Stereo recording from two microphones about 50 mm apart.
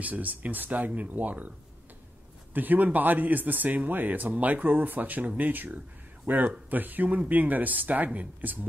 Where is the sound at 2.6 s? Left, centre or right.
Right.